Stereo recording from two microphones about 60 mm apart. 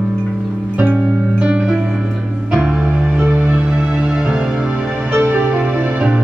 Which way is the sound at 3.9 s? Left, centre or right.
Centre.